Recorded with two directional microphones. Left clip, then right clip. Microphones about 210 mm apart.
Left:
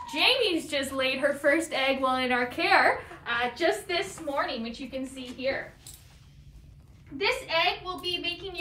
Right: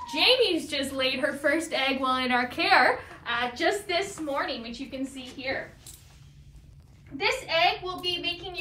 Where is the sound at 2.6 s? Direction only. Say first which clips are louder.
Right 1 dB; 25° right (ahead or behind).